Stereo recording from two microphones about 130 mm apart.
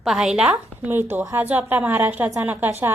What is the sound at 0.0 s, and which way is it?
A woman's voice, 5° right (ahead or behind).